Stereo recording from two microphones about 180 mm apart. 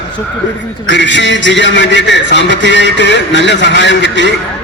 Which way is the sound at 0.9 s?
90° left.